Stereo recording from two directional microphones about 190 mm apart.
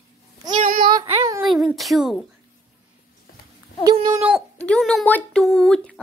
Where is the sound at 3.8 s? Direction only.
20° right (ahead or behind).